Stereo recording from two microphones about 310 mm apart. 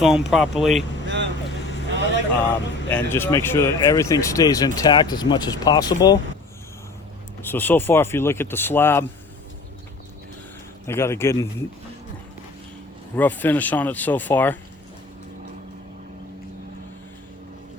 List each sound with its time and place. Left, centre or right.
0.0 s speech: centre
1.0 s vehicle: right
2.5 s speech: centre
7.4 s speech: centre
10.8 s speech: centre
13.1 s speech: centre